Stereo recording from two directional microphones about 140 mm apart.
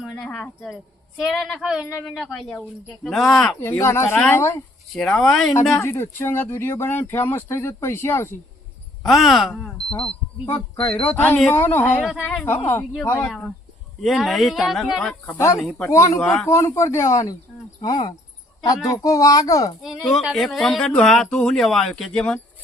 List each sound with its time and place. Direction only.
0.0 s speech: centre (ahead or behind)
3.6 s speech: 20° left (ahead or behind)
4.9 s speech: 5° left (ahead or behind)
5.7 s speech: 15° left (ahead or behind)
9.0 s speech: centre (ahead or behind)
10.5 s speech: 10° left (ahead or behind)
12.0 s speech: centre (ahead or behind)
14.0 s speech: centre (ahead or behind)
15.9 s speech: 20° left (ahead or behind)
16.2 s speech: 5° left (ahead or behind)
16.5 s speech: 20° left (ahead or behind)
20.0 s speech: centre (ahead or behind)